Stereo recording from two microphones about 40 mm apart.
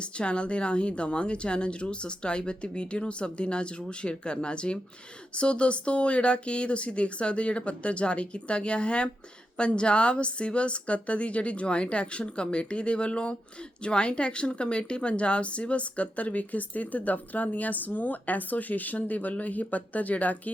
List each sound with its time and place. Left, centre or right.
0.0 s a woman's voice: left